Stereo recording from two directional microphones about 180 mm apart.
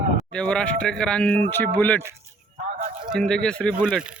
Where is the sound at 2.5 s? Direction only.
45° right (ahead or behind).